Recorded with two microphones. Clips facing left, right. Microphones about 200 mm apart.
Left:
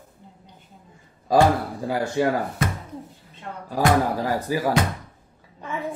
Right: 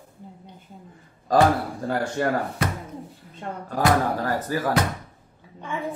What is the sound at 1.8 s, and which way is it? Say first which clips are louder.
Speech: left 3 dB; 10° left (ahead or behind).